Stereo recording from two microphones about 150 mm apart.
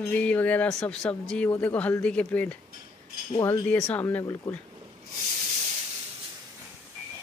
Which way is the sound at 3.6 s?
15° left (ahead or behind).